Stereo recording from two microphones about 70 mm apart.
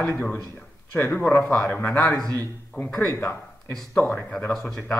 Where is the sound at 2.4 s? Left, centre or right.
Left.